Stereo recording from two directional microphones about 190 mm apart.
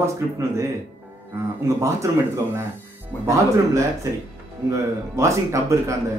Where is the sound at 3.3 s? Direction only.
15° right (ahead or behind).